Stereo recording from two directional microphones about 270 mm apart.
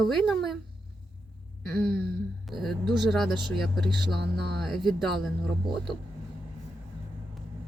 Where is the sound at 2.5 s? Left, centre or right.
Centre.